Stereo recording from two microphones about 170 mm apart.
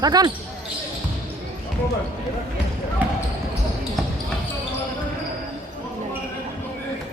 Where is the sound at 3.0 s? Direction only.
10° right (ahead or behind).